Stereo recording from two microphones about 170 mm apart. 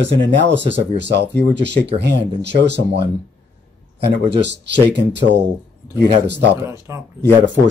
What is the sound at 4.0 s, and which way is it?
Speech, 90° right.